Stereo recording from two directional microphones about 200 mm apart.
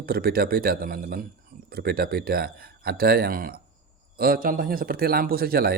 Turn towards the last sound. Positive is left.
turn(degrees=-50)  # may be behind; listen again after turning